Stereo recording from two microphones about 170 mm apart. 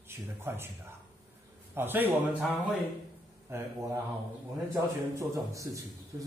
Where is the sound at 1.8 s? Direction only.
10° right (ahead or behind).